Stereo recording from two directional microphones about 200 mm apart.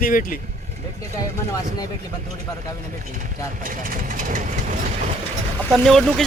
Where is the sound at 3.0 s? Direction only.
40° right (ahead or behind).